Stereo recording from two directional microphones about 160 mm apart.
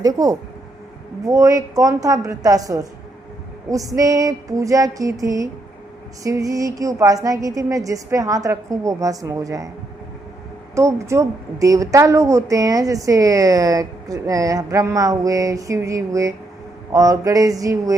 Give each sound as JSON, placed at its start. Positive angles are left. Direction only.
{"t": 0.0, "sound": "a woman's voice", "side_deg": -20}
{"t": 10.8, "sound": "a woman's voice", "side_deg": -20}